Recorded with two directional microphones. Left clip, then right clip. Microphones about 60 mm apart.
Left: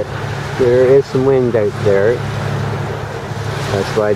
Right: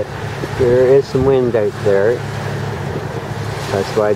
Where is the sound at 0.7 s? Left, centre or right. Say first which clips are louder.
Left 1 dB; centre.